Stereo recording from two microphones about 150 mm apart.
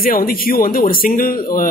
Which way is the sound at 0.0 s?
70° left (ahead or behind).